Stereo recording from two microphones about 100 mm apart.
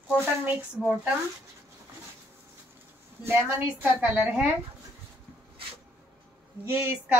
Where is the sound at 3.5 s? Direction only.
15° right (ahead or behind).